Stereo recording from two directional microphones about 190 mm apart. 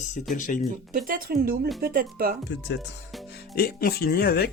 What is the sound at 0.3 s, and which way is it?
Speech, 45° left (ahead or behind).